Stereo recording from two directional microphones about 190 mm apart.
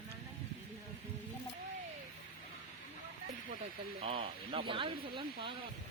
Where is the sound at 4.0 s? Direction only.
30° right (ahead or behind).